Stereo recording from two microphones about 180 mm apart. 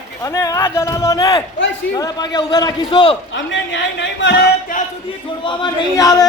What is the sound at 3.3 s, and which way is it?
Speech, 90° left.